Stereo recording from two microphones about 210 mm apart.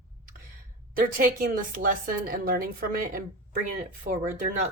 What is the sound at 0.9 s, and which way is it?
A woman's voice, 40° right (ahead or behind).